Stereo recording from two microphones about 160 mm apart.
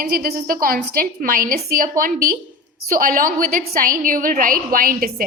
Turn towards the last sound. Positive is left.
turn(degrees=-65)  # may be behind; listen again after turning